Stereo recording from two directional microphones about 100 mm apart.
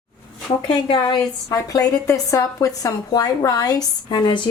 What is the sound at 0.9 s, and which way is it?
Speech, 55° left (ahead or behind).